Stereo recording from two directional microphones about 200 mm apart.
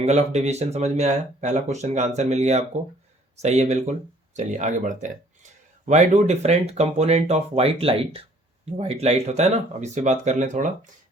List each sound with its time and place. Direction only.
0.0 s speech: 35° right (ahead or behind)